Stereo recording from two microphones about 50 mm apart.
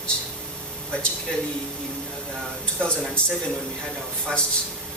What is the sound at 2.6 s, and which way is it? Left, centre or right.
Speech, centre.